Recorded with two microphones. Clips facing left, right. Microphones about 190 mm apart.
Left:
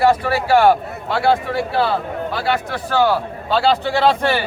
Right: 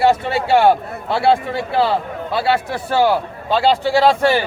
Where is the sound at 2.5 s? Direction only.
25° right (ahead or behind).